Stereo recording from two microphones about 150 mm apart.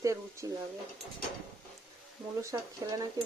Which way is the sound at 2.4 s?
20° right (ahead or behind).